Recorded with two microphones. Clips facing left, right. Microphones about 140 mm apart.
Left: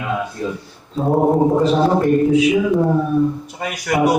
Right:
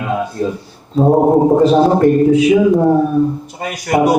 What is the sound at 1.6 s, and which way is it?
Speech, 40° right (ahead or behind).